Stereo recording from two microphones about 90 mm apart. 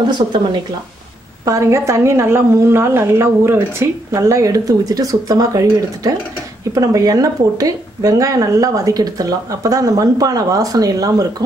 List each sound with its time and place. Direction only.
1.4 s a woman's voice: 35° right (ahead or behind)